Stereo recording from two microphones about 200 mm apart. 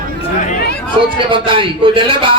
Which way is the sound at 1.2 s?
25° right (ahead or behind).